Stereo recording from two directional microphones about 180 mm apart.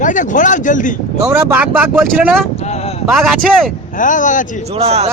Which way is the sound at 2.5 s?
35° left (ahead or behind).